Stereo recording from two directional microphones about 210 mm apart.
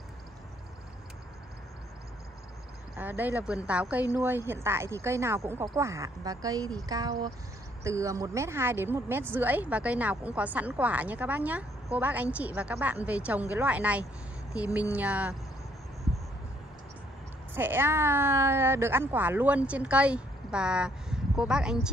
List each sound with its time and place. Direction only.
3.0 s speech: 10° right (ahead or behind)
17.6 s speech: 10° right (ahead or behind)